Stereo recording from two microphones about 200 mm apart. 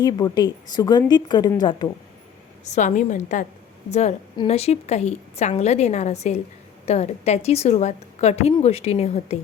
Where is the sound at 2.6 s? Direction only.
35° left (ahead or behind).